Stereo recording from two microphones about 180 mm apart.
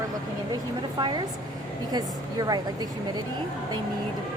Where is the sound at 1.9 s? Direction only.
20° right (ahead or behind).